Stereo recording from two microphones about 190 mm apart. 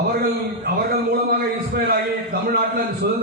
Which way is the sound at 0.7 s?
55° right (ahead or behind).